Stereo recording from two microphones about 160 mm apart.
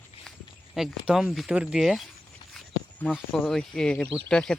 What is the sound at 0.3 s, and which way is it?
Speech, 5° right (ahead or behind).